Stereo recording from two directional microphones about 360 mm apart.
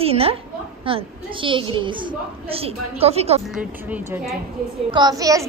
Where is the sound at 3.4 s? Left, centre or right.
Centre.